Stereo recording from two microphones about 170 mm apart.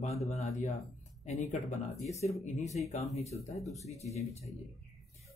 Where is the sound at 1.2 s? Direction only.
40° left (ahead or behind).